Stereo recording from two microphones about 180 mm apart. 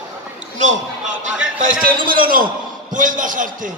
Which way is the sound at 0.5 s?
40° right (ahead or behind).